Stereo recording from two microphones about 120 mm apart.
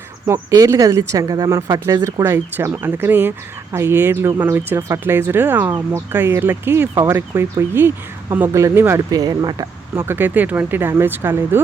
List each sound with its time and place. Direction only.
0.3 s speech: 25° right (ahead or behind)
2.7 s speech: 15° right (ahead or behind)
9.0 s speech: 35° right (ahead or behind)
9.9 s speech: 20° right (ahead or behind)